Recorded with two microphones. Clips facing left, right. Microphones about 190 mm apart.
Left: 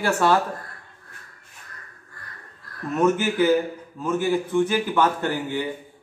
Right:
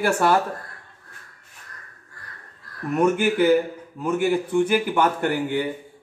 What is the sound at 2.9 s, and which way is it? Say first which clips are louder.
A man's voice: right 1 dB; 15° right (ahead or behind).